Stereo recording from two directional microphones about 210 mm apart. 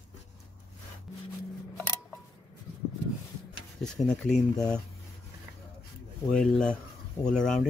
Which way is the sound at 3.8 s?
5° left (ahead or behind).